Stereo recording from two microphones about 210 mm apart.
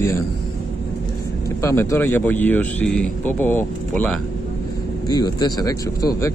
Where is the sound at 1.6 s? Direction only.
15° left (ahead or behind).